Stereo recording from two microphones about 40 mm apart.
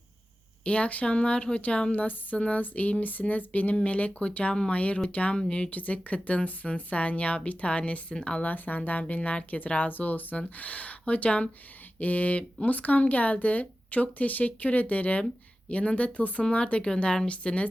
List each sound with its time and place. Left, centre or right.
0.6 s speech: left
5.7 s speech: left
8.4 s speech: left
16.4 s speech: left